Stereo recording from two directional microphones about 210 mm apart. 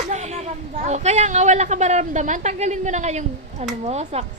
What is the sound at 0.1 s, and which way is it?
A woman's voice, 30° right (ahead or behind).